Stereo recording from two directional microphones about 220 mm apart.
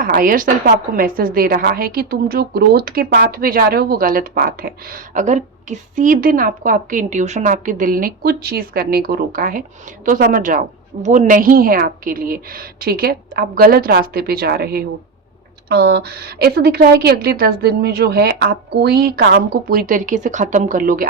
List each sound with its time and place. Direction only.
0.0 s a woman's voice: 40° right (ahead or behind)